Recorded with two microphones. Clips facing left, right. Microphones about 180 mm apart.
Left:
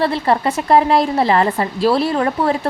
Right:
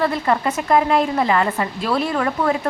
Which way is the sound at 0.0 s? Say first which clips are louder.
Left 3 dB; 30° left (ahead or behind).